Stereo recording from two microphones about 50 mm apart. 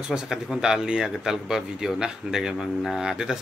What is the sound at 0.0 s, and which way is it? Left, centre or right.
Speech, centre.